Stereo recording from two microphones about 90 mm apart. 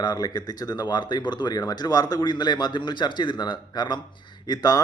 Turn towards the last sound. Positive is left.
turn(degrees=50)  # may be behind; listen again after turning